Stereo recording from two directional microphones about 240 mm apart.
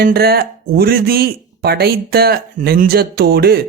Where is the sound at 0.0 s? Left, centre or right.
Right.